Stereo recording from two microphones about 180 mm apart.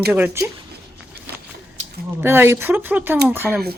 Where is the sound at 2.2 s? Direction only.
15° right (ahead or behind).